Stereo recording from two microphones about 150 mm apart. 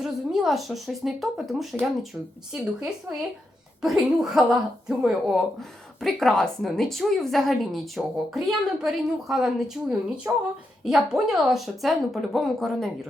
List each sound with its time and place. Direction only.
0.0 s speech: centre (ahead or behind)
10.3 s speech: 15° right (ahead or behind)
10.8 s speech: 5° right (ahead or behind)